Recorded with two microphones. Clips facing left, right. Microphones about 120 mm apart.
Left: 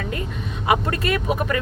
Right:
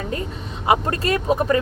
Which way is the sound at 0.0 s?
30° right (ahead or behind).